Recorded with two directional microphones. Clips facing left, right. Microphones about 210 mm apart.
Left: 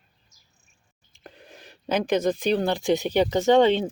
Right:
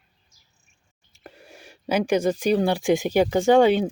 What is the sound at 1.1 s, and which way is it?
Speech, 10° right (ahead or behind).